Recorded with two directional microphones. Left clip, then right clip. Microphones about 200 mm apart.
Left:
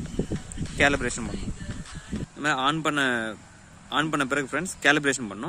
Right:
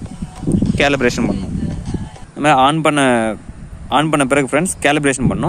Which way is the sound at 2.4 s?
35° right (ahead or behind).